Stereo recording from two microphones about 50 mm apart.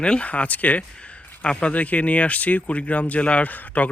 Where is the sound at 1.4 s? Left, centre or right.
Left.